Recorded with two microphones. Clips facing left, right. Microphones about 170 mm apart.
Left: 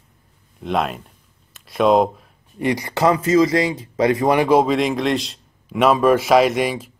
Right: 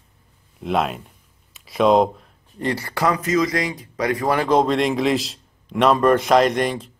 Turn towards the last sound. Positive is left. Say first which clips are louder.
# left 1 dB
turn(degrees=5)  # may be behind; listen again after turning